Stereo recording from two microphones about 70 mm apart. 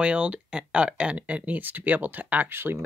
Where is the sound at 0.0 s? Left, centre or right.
Centre.